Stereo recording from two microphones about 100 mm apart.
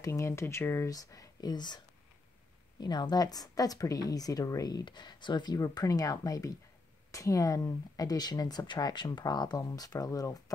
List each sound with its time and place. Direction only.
0.0 s speech: 30° left (ahead or behind); by 1.8 s 45° left (ahead or behind)
2.8 s speech: 45° left (ahead or behind)